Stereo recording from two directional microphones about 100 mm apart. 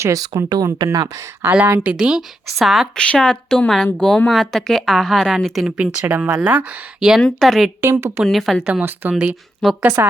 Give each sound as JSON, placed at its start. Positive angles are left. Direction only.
{"t": 0.0, "sound": "speech", "side_deg": -35}
{"t": 1.5, "sound": "a woman's voice", "side_deg": -15}
{"t": 7.2, "sound": "a woman's voice", "side_deg": 5}
{"t": 7.8, "sound": "a woman's voice", "side_deg": -25}
{"t": 8.2, "sound": "a woman's voice", "side_deg": 0}
{"t": 8.6, "sound": "a woman's voice", "side_deg": -15}
{"t": 9.6, "sound": "a woman's voice", "side_deg": 0}
{"t": 10.0, "sound": "a woman's voice", "side_deg": -25}